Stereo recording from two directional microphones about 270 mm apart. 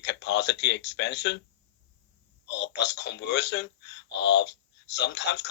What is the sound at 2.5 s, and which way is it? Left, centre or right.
Speech, left.